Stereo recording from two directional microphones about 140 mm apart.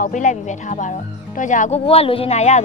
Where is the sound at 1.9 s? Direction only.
45° left (ahead or behind).